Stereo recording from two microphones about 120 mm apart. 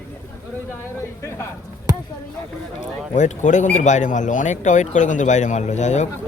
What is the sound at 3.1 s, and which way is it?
Speech, 90° left.